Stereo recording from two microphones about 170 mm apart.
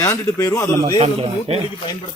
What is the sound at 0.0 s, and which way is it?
Speech, 15° left (ahead or behind).